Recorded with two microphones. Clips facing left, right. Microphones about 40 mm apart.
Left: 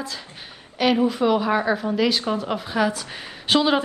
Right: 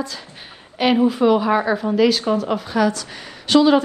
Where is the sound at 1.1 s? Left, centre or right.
Centre.